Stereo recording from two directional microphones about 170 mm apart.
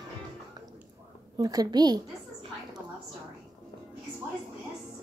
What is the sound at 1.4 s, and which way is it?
Speech, 20° right (ahead or behind).